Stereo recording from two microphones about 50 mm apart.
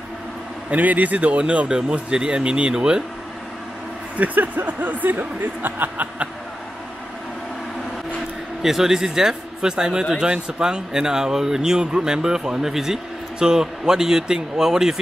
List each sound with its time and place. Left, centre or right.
0.7 s speech: right; by 3.0 s centre
4.2 s speech: right
8.6 s speech: centre